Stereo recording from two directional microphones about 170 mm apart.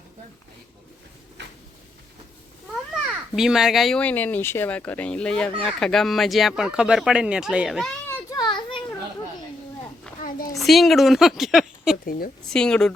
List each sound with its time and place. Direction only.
3.1 s speech: 5° right (ahead or behind)
8.0 s children playing: 10° left (ahead or behind)
8.4 s children playing: 25° left (ahead or behind)
10.2 s a sound: 55° left (ahead or behind)
10.6 s a woman's voice: centre (ahead or behind)
12.0 s a woman's voice: 60° left (ahead or behind)
12.5 s speech: 5° left (ahead or behind)